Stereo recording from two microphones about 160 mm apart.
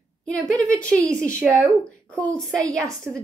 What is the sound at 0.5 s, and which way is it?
Speech, 20° right (ahead or behind).